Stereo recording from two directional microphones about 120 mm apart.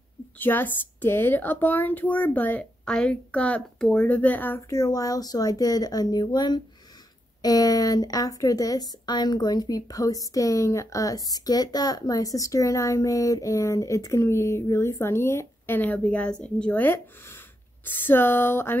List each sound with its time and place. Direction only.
0.4 s a woman's voice: 15° left (ahead or behind)